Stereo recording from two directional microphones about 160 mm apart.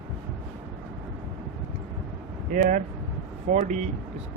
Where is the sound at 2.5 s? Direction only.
55° right (ahead or behind).